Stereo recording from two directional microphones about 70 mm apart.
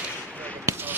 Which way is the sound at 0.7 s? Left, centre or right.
Right.